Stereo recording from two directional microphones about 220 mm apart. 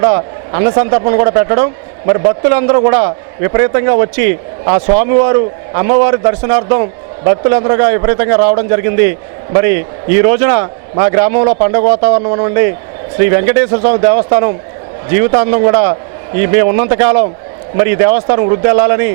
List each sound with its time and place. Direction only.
0.0 s a man's voice: 25° right (ahead or behind)
13.9 s speech: 35° right (ahead or behind)
14.3 s a man's voice: 25° right (ahead or behind)
18.1 s a man's voice: 30° right (ahead or behind)